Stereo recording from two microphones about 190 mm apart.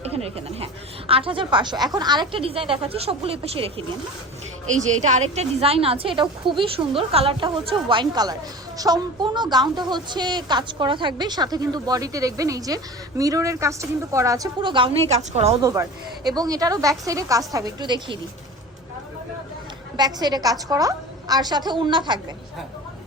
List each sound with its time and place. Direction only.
0.0 s a woman's voice: 30° right (ahead or behind)
15.1 s a woman's voice: 35° right (ahead or behind)
15.6 s a woman's voice: 15° right (ahead or behind)
20.0 s a woman's voice: 20° right (ahead or behind)